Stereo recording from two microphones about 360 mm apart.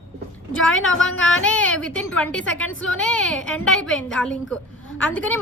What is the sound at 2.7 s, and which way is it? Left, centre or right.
Speech, left.